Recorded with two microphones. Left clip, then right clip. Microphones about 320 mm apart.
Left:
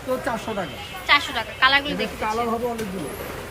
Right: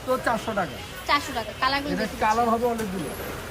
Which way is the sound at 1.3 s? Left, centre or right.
Centre.